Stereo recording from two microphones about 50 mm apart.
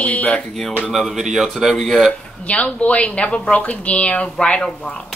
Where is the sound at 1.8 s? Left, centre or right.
Centre.